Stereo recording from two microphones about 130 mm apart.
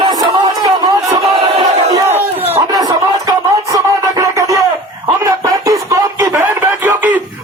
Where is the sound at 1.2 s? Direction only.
45° right (ahead or behind).